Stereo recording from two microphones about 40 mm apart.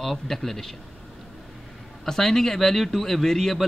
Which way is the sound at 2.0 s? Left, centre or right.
Centre.